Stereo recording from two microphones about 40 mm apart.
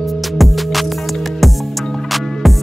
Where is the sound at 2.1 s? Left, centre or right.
Centre.